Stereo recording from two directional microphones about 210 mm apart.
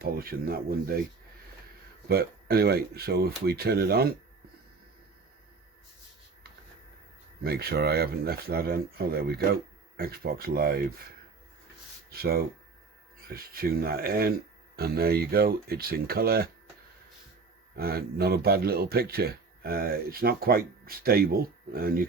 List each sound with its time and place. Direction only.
0.0 s speech: 45° right (ahead or behind)
2.0 s speech: 45° right (ahead or behind)
7.4 s speech: 50° right (ahead or behind)
12.1 s speech: 45° right (ahead or behind)
17.7 s speech: 45° right (ahead or behind)